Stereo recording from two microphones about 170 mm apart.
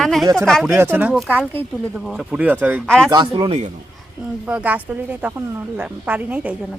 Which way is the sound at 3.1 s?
25° right (ahead or behind).